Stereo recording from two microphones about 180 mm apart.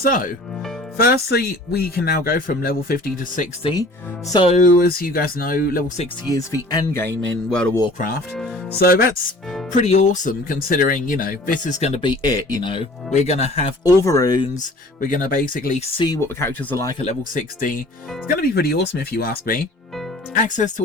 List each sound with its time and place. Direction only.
0.0 s speech: 50° left (ahead or behind)
3.6 s speech: 25° left (ahead or behind)
4.5 s speech: 50° left (ahead or behind)
6.2 s speech: 20° left (ahead or behind)
7.1 s music: 90° right
7.9 s speech: 55° left (ahead or behind)
9.7 s speech: 40° left (ahead or behind)
13.8 s speech: 15° left (ahead or behind)
15.0 s speech: 50° left (ahead or behind)
16.0 s speech: 20° left (ahead or behind)
17.1 s speech: 45° left (ahead or behind)
18.3 s speech: 60° left (ahead or behind); by 20.8 s 45° left (ahead or behind)